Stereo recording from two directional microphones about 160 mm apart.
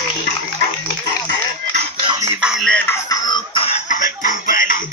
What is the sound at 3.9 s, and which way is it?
Music, 55° left (ahead or behind).